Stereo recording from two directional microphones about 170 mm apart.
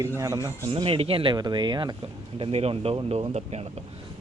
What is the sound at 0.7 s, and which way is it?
A man's voice, 35° right (ahead or behind).